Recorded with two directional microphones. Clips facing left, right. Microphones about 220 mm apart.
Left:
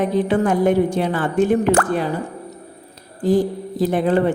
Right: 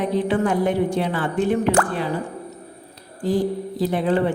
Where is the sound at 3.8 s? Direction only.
45° left (ahead or behind).